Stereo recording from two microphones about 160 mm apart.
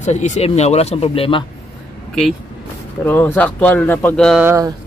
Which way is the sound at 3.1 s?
10° left (ahead or behind).